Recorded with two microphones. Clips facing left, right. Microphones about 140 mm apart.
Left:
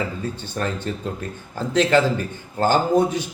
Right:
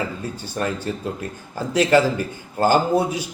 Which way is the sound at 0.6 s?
5° right (ahead or behind).